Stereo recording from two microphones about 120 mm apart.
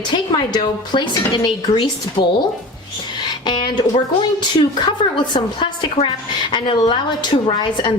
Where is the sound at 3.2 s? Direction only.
40° left (ahead or behind).